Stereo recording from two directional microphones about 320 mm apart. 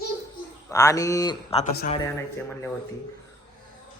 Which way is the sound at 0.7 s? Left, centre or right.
Centre.